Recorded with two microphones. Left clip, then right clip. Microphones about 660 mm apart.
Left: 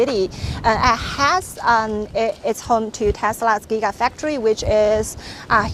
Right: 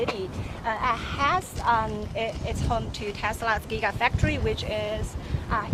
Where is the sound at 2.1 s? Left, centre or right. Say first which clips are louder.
Left 12 dB; left.